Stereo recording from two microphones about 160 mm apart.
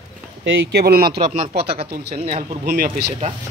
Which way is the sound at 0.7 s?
75° right (ahead or behind).